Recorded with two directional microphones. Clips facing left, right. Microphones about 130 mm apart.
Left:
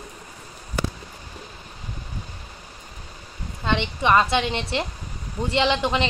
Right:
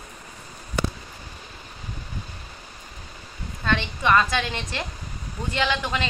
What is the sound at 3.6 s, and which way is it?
A woman's voice, 20° left (ahead or behind).